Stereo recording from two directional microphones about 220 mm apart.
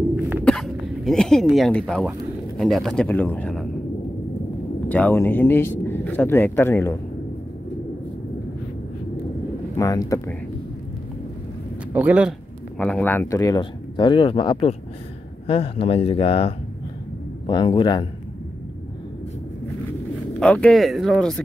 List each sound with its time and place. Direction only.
0.5 s speech: centre (ahead or behind)
4.8 s speech: 5° left (ahead or behind)
9.8 s speech: 15° left (ahead or behind)
11.9 s speech: 5° right (ahead or behind)
12.7 s speech: 5° left (ahead or behind); by 18.0 s 20° left (ahead or behind)
20.3 s speech: 5° left (ahead or behind)